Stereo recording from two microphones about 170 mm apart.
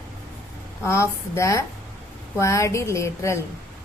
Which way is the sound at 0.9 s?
15° left (ahead or behind).